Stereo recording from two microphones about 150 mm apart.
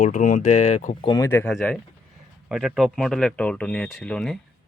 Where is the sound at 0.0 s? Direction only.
55° left (ahead or behind).